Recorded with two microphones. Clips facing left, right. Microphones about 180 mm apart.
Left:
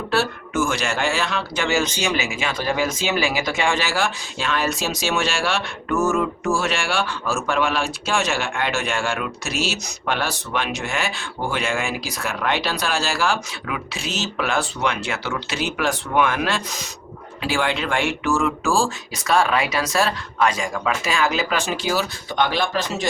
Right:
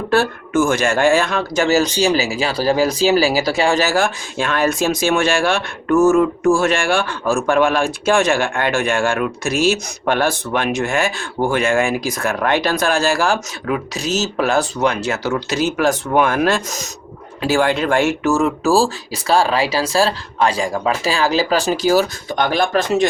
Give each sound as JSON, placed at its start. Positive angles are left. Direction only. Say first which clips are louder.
{"t": 0.1, "sound": "speech", "louder": "right 6 dB", "side_deg": -50}